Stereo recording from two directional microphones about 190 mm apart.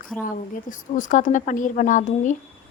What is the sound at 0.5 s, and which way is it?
Speech, 45° left (ahead or behind).